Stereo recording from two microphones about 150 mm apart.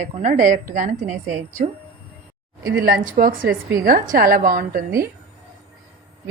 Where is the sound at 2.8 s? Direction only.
75° right (ahead or behind).